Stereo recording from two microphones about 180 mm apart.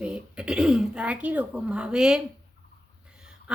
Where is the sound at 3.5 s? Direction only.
5° right (ahead or behind).